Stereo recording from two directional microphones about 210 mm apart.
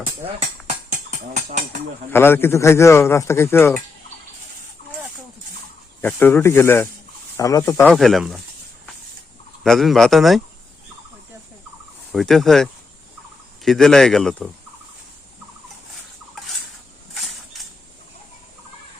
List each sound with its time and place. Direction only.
1.5 s speech: 35° right (ahead or behind)
2.1 s speech: 10° left (ahead or behind)
6.0 s speech: 10° left (ahead or behind)
9.6 s speech: centre (ahead or behind)
12.1 s speech: centre (ahead or behind)
13.7 s speech: centre (ahead or behind)